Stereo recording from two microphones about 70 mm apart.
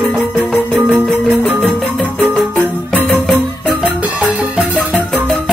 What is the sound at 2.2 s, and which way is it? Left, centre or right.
Music, centre.